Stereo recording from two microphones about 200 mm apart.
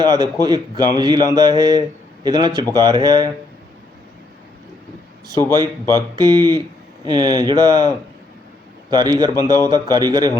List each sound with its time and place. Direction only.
0.0 s speech: 20° right (ahead or behind)
5.3 s a man's voice: 15° left (ahead or behind)
5.9 s speech: 20° right (ahead or behind)